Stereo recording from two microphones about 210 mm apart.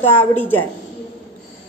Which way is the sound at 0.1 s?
10° left (ahead or behind).